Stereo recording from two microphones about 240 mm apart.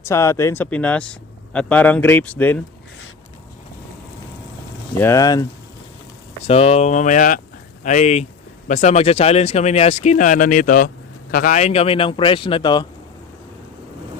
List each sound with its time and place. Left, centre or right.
0.0 s speech: centre
4.9 s speech: centre
6.5 s speech: left